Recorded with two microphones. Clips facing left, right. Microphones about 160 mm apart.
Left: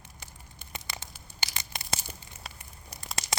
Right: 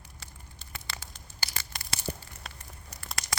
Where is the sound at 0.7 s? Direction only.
20° left (ahead or behind).